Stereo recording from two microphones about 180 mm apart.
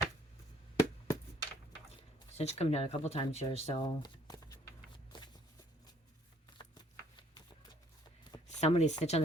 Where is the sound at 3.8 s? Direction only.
25° left (ahead or behind).